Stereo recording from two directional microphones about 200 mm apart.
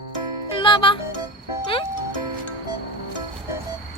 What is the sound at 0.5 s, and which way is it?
Music, 25° left (ahead or behind).